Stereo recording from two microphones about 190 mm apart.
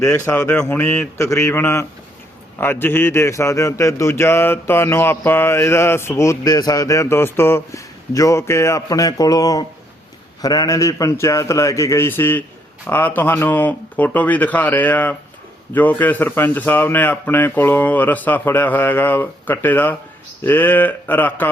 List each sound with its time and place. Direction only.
0.0 s speech: 10° left (ahead or behind)